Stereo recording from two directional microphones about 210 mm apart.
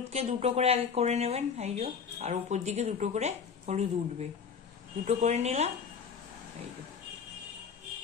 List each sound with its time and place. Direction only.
0.1 s speech: 30° right (ahead or behind)